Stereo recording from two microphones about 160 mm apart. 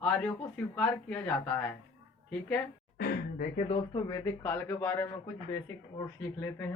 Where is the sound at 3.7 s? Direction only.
30° left (ahead or behind).